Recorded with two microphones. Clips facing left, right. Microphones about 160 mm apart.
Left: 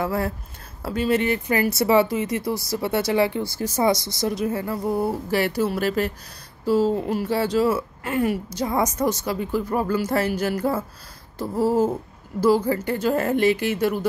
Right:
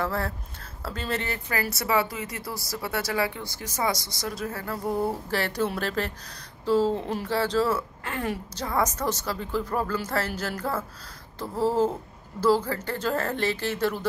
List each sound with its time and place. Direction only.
0.0 s a woman's voice: 15° left (ahead or behind)